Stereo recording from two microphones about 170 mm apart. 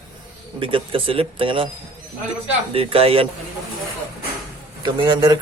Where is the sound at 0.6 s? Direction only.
30° right (ahead or behind).